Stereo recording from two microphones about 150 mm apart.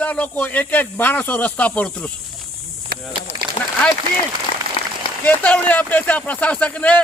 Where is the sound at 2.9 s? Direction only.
90° right.